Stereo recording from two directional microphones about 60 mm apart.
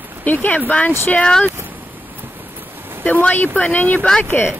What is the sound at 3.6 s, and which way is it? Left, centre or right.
Speech, left.